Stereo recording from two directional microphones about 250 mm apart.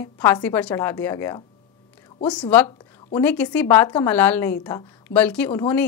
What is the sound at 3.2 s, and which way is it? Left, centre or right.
Speech, centre.